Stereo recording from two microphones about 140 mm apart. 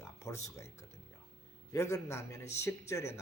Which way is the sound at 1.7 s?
20° left (ahead or behind).